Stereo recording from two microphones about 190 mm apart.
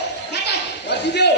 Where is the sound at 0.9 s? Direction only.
65° left (ahead or behind).